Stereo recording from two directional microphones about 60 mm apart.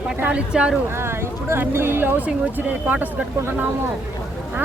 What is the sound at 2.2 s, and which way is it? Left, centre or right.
Speech, right.